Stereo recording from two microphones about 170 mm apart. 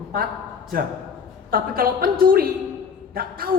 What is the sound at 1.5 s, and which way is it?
A woman's voice, 60° right (ahead or behind).